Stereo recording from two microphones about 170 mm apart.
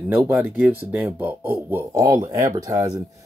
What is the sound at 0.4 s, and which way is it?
Speech, 10° right (ahead or behind).